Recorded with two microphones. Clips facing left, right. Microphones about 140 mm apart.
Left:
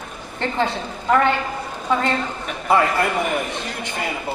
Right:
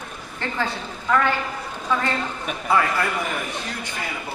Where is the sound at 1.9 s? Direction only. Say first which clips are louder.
Left 3 dB; 25° left (ahead or behind).